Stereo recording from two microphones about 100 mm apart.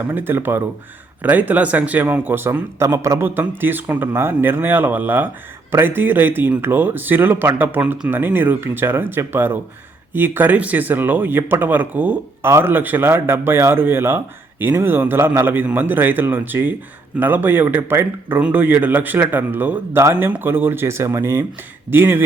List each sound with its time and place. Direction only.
0.0 s speech: 20° right (ahead or behind)